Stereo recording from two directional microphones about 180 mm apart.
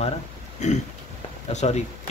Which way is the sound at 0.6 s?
40° left (ahead or behind).